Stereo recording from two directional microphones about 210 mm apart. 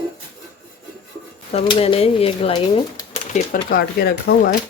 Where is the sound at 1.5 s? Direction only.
25° left (ahead or behind).